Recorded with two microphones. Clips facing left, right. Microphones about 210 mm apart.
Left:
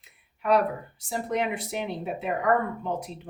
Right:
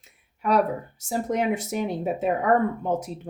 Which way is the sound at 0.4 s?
45° right (ahead or behind).